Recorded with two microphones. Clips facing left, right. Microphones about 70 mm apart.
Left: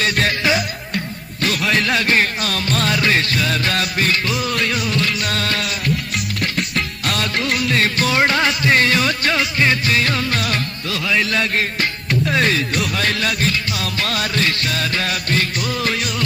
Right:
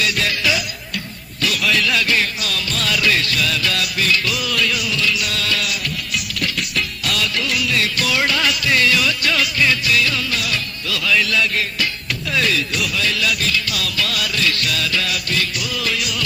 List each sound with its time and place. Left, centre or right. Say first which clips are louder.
0.0 s music: left 2 dB; left